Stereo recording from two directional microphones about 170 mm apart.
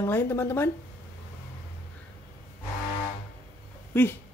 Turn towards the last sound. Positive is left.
turn(degrees=15)  # may be behind; listen again after turning